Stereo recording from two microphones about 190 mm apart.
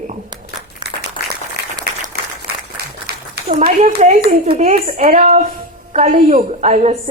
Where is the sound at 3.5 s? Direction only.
35° right (ahead or behind).